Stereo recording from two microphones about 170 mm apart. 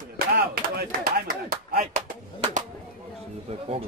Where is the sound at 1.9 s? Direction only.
45° right (ahead or behind).